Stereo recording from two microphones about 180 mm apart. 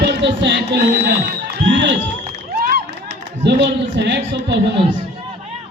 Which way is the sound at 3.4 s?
75° right (ahead or behind).